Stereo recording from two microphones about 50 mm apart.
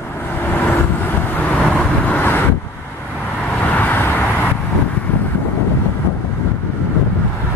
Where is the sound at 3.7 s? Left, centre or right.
Left.